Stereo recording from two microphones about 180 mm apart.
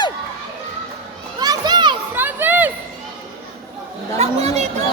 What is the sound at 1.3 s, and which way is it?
Children playing, 20° right (ahead or behind).